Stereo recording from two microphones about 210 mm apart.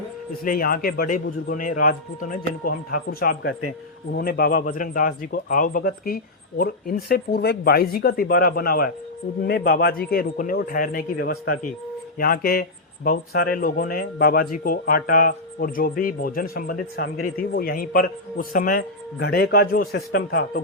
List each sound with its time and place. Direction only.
0.4 s speech: 45° left (ahead or behind)